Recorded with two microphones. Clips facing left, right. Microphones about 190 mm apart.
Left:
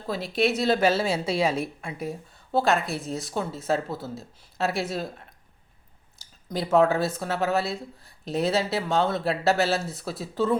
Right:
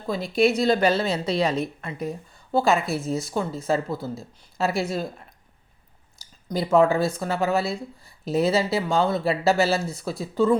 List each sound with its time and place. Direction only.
0.1 s speech: centre (ahead or behind)